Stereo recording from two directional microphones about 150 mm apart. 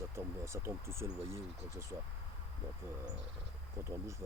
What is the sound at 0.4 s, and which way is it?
Speech, 20° right (ahead or behind).